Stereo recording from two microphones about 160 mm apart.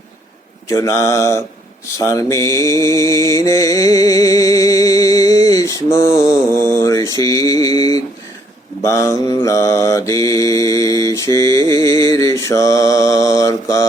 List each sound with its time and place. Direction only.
0.7 s mantra: 20° left (ahead or behind)